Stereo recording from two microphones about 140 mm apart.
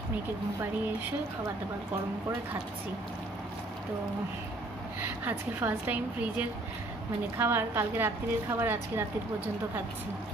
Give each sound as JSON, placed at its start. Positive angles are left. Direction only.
{"t": 5.2, "sound": "a woman's voice", "side_deg": -15}